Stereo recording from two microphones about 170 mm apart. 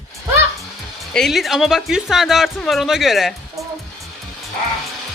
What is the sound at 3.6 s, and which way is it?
Music, 20° right (ahead or behind).